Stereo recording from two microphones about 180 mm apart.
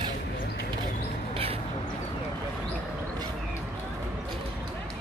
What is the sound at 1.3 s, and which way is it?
Crow, 30° right (ahead or behind).